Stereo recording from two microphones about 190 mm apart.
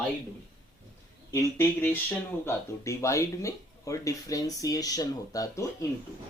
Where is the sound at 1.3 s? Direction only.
15° left (ahead or behind).